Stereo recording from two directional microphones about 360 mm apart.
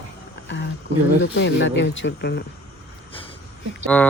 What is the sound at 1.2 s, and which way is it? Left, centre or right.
Speech, left.